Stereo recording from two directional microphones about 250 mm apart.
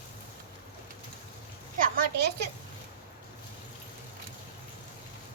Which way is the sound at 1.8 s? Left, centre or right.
Right.